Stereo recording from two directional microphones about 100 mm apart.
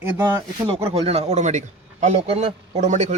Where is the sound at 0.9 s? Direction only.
90° right.